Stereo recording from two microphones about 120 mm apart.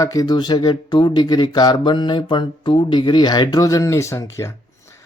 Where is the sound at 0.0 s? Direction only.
30° left (ahead or behind).